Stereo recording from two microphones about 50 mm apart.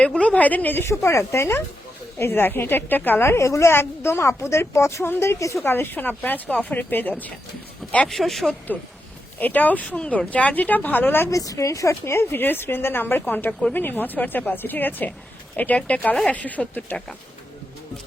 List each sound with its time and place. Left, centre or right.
0.0 s speech: left
0.8 s a woman's voice: left
2.1 s speech: left
3.2 s a woman's voice: left
3.7 s a woman's voice: left
5.6 s speech: left
8.0 s speech: centre
8.7 s speech: left
11.3 s speech: left
12.4 s speech: left
13.5 s speech: centre
13.7 s speech: left